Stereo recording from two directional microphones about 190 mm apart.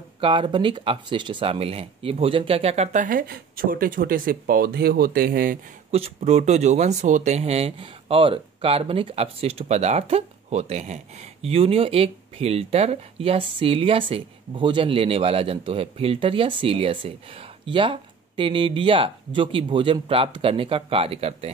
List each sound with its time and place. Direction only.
0.2 s speech: 25° right (ahead or behind); by 5.6 s 50° right (ahead or behind)
5.9 s speech: 30° right (ahead or behind)